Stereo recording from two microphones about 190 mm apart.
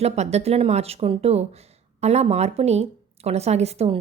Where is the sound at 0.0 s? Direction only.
35° right (ahead or behind).